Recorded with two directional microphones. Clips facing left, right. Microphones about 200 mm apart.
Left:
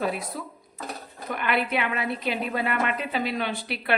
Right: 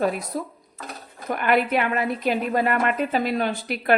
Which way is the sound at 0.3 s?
45° right (ahead or behind).